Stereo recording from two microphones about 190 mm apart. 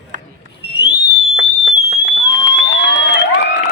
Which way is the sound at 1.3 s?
65° left (ahead or behind).